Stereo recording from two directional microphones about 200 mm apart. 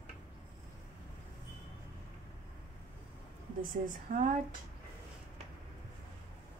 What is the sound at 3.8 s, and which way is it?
Speech, 40° right (ahead or behind).